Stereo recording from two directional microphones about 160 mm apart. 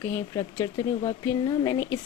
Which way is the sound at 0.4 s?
25° left (ahead or behind).